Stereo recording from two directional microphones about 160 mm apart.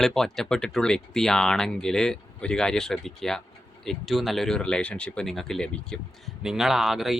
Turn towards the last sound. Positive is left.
turn(degrees=0)  # may be behind; listen again after turning